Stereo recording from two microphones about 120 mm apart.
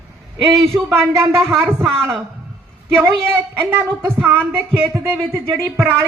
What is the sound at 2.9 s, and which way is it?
A woman's voice, 20° right (ahead or behind).